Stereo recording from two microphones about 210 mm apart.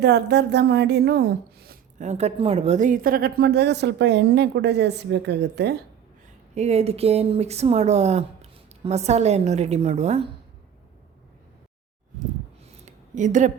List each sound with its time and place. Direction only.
0.0 s a woman's voice: 50° right (ahead or behind)
6.5 s speech: 30° right (ahead or behind)
12.8 s a sound: 35° right (ahead or behind)